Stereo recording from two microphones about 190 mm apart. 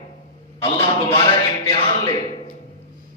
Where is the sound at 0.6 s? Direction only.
30° left (ahead or behind).